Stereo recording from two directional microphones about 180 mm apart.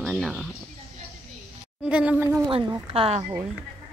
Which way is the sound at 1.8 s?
10° right (ahead or behind).